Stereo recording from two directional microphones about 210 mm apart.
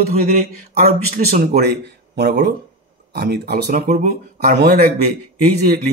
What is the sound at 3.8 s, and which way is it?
Speech, 35° right (ahead or behind).